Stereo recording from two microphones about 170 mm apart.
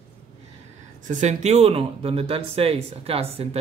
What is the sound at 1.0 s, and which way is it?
Speech, 45° right (ahead or behind).